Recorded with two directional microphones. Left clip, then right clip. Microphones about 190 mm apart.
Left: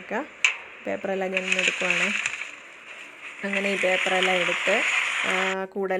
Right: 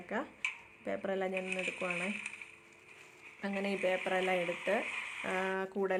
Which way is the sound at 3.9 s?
50° left (ahead or behind).